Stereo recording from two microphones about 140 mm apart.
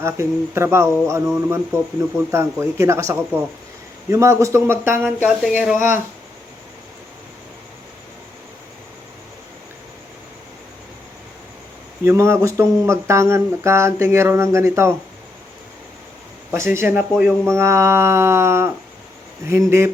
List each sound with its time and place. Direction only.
0.0 s speech: 20° right (ahead or behind)
5.0 s speech: 5° right (ahead or behind)
5.7 s speech: 65° left (ahead or behind)
12.0 s speech: 20° right (ahead or behind)
16.5 s speech: 20° right (ahead or behind)
17.4 s speech: 20° right (ahead or behind)